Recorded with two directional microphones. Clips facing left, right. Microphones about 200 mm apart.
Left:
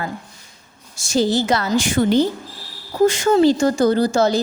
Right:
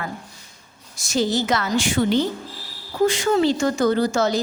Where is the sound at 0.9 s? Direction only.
30° left (ahead or behind).